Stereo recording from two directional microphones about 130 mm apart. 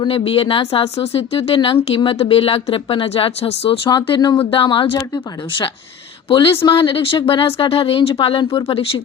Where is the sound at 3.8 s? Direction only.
35° left (ahead or behind).